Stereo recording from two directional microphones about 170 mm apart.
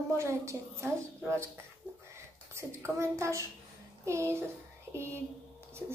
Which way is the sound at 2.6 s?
15° right (ahead or behind).